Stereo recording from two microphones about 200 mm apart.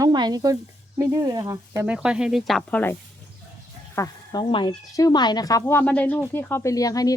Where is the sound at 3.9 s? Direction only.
20° left (ahead or behind).